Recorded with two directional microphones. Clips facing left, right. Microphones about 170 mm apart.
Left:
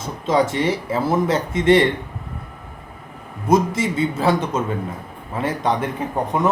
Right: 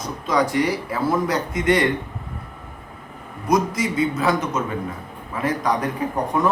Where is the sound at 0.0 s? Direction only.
25° left (ahead or behind).